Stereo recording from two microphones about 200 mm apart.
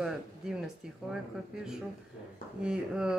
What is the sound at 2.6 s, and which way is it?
Speech, 5° right (ahead or behind).